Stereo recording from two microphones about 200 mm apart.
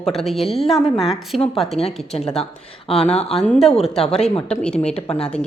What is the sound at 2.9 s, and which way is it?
Speech, 30° left (ahead or behind).